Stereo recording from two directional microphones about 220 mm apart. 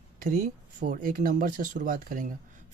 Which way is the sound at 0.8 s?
35° right (ahead or behind).